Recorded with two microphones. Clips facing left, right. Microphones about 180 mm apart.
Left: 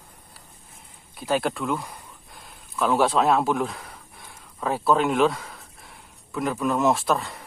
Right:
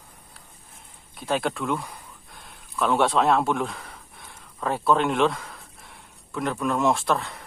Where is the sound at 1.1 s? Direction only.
Centre (ahead or behind).